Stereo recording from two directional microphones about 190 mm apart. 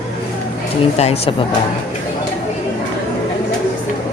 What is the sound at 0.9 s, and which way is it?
Speech, 35° left (ahead or behind).